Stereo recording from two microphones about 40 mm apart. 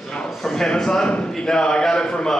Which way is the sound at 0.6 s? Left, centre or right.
Centre.